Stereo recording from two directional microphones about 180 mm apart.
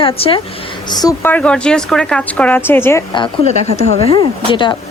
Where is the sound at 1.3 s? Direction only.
5° left (ahead or behind).